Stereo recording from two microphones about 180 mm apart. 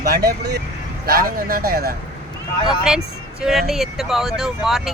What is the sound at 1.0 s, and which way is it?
Speech, 55° right (ahead or behind).